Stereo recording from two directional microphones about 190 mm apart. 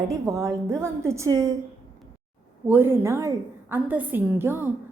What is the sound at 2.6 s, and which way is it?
A woman's voice, 10° right (ahead or behind).